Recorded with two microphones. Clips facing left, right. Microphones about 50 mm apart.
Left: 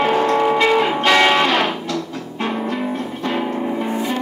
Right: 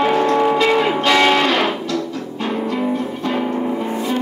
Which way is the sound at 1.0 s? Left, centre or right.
Left.